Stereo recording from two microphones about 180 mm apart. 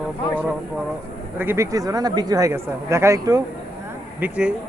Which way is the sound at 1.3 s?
15° right (ahead or behind).